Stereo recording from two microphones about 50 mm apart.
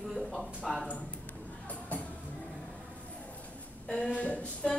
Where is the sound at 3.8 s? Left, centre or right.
Centre.